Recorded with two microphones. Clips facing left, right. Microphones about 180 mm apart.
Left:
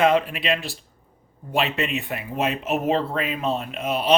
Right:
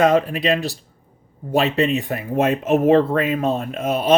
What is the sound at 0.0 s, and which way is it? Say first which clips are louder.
Speech: right 3 dB; 40° right (ahead or behind).